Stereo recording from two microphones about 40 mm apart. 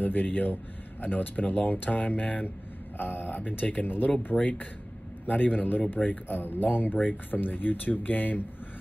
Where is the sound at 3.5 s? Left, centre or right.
Left.